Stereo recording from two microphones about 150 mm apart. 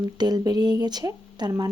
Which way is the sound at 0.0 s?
25° right (ahead or behind).